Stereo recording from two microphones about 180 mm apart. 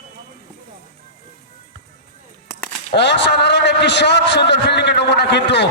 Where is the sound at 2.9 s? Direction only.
70° left (ahead or behind).